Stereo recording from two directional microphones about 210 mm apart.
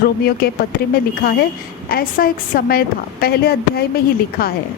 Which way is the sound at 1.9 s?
45° left (ahead or behind).